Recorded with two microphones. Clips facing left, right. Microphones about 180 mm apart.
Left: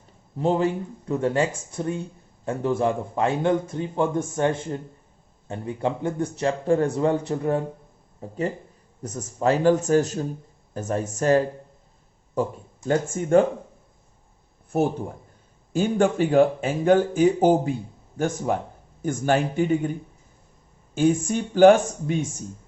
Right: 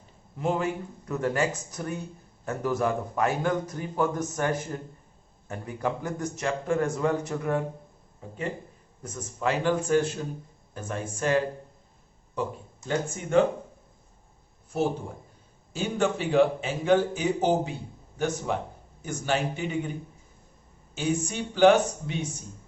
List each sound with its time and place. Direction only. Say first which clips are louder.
0.3 s a man's voice: left 5 dB; 30° left (ahead or behind)
13.2 s speech: left 9 dB; 40° left (ahead or behind)
15.7 s speech: left 6 dB; 50° left (ahead or behind)
20.9 s speech: left 8 dB; 50° left (ahead or behind)